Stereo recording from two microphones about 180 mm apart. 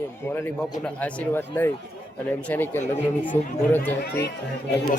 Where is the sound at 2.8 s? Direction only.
45° left (ahead or behind).